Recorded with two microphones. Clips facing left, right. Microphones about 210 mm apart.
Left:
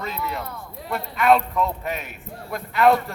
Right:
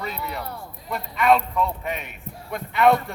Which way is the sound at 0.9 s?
5° left (ahead or behind).